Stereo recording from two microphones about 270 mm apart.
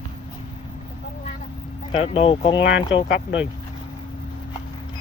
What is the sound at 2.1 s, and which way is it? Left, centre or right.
Speech, centre.